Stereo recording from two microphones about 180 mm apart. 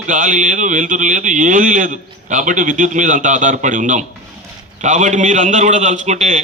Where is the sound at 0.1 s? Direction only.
45° right (ahead or behind).